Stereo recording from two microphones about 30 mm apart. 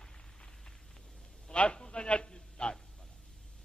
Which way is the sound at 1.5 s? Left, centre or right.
Left.